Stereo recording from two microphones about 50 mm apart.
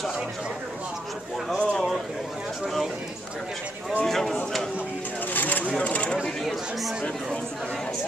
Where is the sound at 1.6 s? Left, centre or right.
Centre.